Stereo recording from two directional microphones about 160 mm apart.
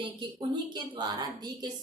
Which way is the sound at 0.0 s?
30° right (ahead or behind).